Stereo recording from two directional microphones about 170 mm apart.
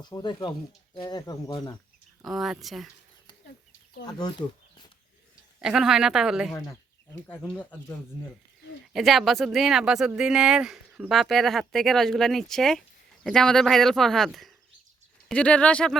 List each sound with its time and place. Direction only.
0.0 s speech: 25° left (ahead or behind)
2.2 s speech: centre (ahead or behind)
4.0 s speech: 25° left (ahead or behind)
5.5 s speech: 5° right (ahead or behind)
6.5 s speech: 15° left (ahead or behind)
8.9 s speech: centre (ahead or behind)